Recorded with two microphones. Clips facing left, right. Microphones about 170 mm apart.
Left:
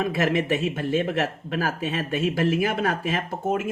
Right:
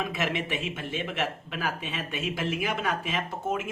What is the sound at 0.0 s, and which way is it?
Speech, 45° left (ahead or behind).